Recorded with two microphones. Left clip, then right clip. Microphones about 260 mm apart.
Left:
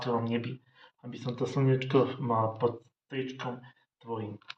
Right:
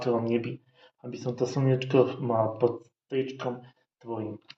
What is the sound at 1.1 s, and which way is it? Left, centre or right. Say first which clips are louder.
Speech: right 3 dB; left.